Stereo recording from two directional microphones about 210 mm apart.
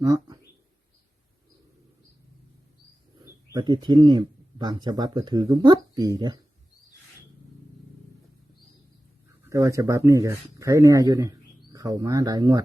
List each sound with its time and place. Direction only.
3.5 s speech: 20° right (ahead or behind)
9.4 s speech: 15° right (ahead or behind)